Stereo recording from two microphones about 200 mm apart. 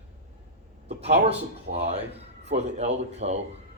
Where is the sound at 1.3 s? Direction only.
30° right (ahead or behind).